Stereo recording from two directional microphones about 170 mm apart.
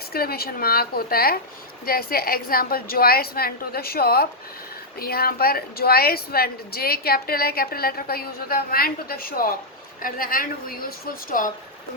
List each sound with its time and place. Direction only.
0.1 s a woman's voice: 65° left (ahead or behind)